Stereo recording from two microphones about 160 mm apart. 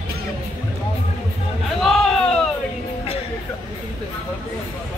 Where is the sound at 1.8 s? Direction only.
Centre (ahead or behind).